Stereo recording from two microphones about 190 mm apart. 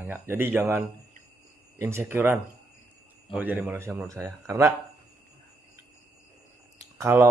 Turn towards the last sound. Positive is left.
turn(degrees=-15)  # may be behind; listen again after turning